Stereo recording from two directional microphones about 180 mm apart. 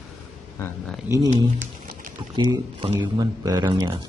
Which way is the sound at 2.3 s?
25° right (ahead or behind).